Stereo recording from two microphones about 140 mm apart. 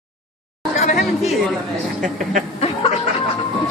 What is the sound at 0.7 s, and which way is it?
Chatter, 55° left (ahead or behind).